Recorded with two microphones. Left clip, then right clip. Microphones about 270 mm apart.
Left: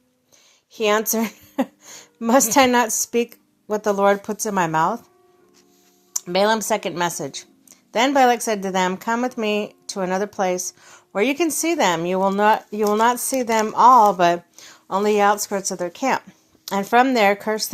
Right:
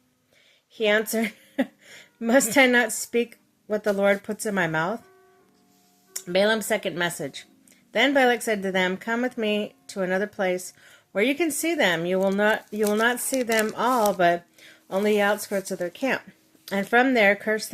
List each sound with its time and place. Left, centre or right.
0.7 s speech: centre
1.1 s a sound: centre
2.2 s speech: centre
6.1 s speech: centre